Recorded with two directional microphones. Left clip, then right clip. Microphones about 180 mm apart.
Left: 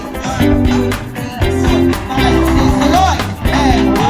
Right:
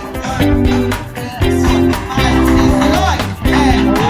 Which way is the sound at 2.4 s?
35° left (ahead or behind).